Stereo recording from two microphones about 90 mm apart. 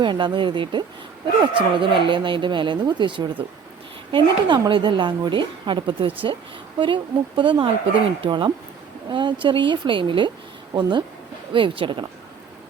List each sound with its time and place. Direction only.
0.0 s a woman's voice: 60° right (ahead or behind)
11.5 s speech: 70° right (ahead or behind)